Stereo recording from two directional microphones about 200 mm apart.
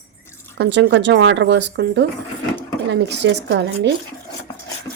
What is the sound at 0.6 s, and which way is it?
Speech, 60° right (ahead or behind).